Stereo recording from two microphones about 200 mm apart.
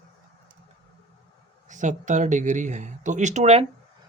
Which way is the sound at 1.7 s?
40° right (ahead or behind).